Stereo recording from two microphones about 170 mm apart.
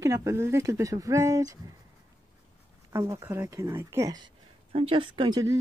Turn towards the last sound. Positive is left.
turn(degrees=-25)  # may be behind; listen again after turning